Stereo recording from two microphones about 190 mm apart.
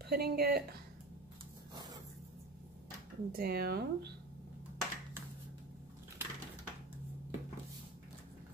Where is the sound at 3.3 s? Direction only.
55° right (ahead or behind).